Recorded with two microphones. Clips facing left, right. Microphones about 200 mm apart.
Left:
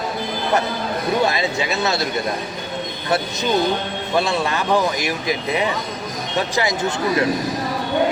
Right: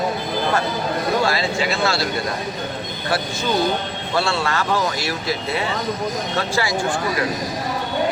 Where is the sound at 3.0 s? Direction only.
20° left (ahead or behind).